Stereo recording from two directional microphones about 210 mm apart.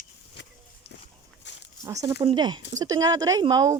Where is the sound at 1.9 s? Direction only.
15° right (ahead or behind).